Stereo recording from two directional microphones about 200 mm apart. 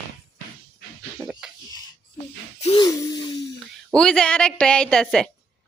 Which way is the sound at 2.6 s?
30° left (ahead or behind).